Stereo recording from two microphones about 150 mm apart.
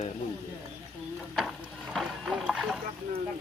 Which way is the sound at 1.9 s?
Centre (ahead or behind).